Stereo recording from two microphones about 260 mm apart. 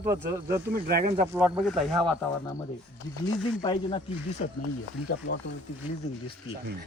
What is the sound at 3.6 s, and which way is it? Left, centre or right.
Speech, centre.